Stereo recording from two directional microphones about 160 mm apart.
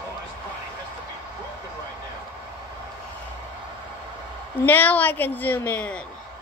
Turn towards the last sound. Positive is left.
turn(degrees=10)  # may be behind; listen again after turning